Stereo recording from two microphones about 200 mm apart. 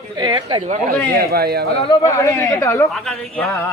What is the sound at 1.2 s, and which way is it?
Speech, 50° right (ahead or behind).